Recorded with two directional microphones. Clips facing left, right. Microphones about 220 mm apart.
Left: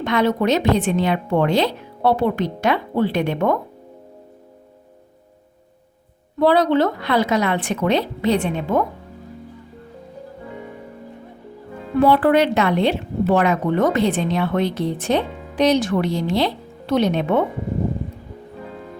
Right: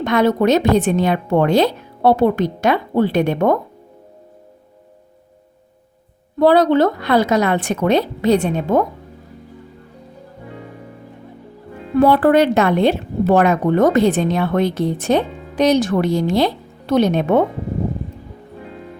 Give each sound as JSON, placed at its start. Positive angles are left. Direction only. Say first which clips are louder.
{"t": 0.0, "sound": "a woman's voice", "louder": "right 3 dB", "side_deg": -45}
{"t": 6.4, "sound": "a woman's voice", "louder": "right 3 dB", "side_deg": -45}
{"t": 11.9, "sound": "a woman's voice", "louder": "right 3 dB", "side_deg": -45}